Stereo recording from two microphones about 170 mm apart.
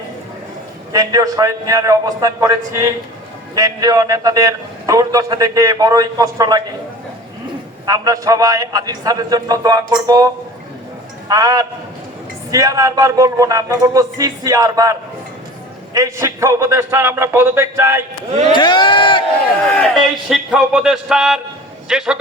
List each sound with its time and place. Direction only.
0.9 s a man's voice: 20° right (ahead or behind)
7.9 s a man's voice: 20° right (ahead or behind)
11.3 s a man's voice: 20° right (ahead or behind)
18.3 s a sound: 40° right (ahead or behind)
18.5 s speech: 25° left (ahead or behind)
20.0 s music: centre (ahead or behind)